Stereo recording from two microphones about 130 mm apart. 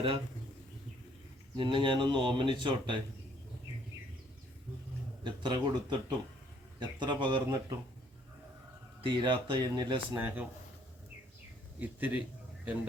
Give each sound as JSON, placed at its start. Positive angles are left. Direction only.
{"t": 1.5, "sound": "speech", "side_deg": -40}
{"t": 5.2, "sound": "speech", "side_deg": -35}
{"t": 9.0, "sound": "speech", "side_deg": -40}
{"t": 10.2, "sound": "a man's voice", "side_deg": -15}
{"t": 11.8, "sound": "a man's voice", "side_deg": -15}